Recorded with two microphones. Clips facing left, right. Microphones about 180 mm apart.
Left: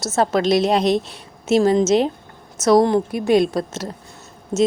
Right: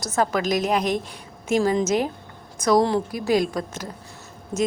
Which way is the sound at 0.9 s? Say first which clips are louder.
Left 6 dB; 85° left.